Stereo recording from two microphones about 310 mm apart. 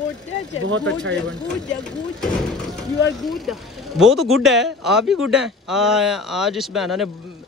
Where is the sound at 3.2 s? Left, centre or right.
Centre.